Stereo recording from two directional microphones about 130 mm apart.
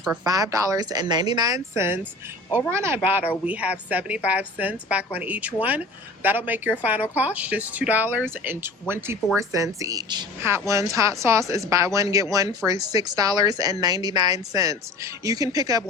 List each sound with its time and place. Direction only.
0.3 s speech: 30° right (ahead or behind)